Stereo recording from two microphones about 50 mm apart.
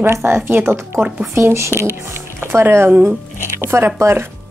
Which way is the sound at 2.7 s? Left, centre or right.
Right.